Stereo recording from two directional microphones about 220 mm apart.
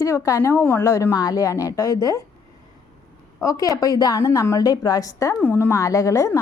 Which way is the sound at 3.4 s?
15° left (ahead or behind).